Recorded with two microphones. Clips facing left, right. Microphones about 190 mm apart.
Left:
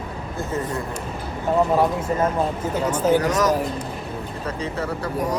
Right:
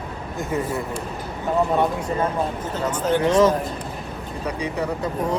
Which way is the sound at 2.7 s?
10° left (ahead or behind).